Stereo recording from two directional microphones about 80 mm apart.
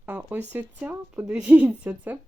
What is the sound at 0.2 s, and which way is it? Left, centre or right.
Speech, right.